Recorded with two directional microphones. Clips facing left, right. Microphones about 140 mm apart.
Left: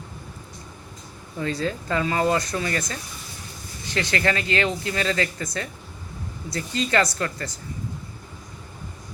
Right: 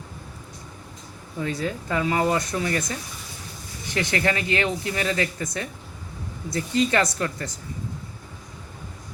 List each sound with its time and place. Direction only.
1.4 s speech: 15° right (ahead or behind)